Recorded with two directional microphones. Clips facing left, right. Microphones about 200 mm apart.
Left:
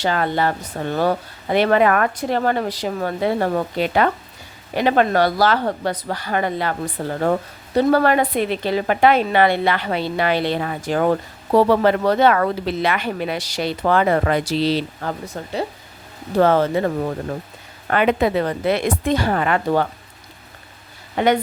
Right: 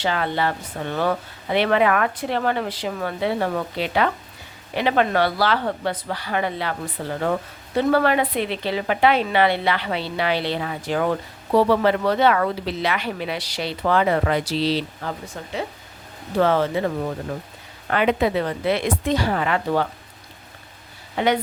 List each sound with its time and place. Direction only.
0.0 s a woman's voice: 45° left (ahead or behind)
21.2 s a woman's voice: 50° left (ahead or behind)